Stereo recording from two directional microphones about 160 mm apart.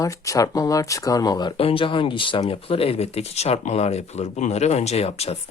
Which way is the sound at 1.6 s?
35° left (ahead or behind).